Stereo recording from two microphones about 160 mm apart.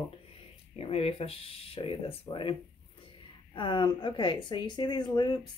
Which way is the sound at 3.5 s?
30° left (ahead or behind).